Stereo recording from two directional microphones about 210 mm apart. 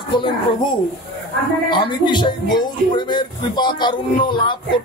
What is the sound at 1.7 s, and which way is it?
Speech, 20° left (ahead or behind).